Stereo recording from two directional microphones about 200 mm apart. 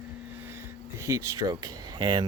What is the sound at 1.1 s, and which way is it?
Speech, 15° right (ahead or behind).